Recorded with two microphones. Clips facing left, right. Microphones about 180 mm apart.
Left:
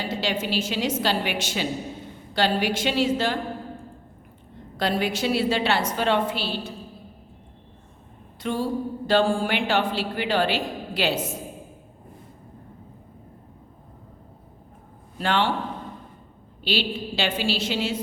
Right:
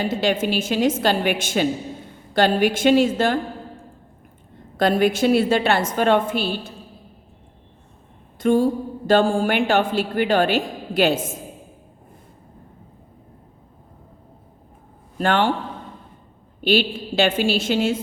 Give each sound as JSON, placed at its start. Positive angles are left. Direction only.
{"t": 0.0, "sound": "a woman's voice", "side_deg": -50}
{"t": 4.8, "sound": "a woman's voice", "side_deg": -50}
{"t": 8.4, "sound": "a woman's voice", "side_deg": -50}
{"t": 15.2, "sound": "a woman's voice", "side_deg": -50}
{"t": 16.6, "sound": "a woman's voice", "side_deg": -50}